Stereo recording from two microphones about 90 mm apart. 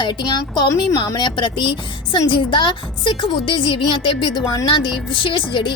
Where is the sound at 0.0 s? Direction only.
55° left (ahead or behind).